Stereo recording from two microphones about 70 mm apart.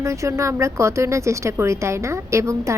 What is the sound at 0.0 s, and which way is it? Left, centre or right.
A woman's voice, right.